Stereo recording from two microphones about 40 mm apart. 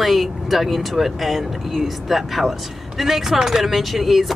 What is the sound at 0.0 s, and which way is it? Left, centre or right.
Speech, centre.